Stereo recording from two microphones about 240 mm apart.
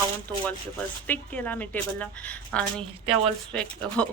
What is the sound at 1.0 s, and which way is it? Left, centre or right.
A woman's voice, centre.